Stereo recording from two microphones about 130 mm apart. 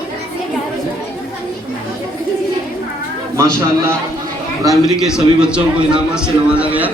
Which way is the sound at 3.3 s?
25° right (ahead or behind).